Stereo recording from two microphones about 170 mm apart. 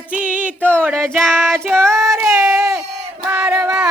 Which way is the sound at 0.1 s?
10° right (ahead or behind).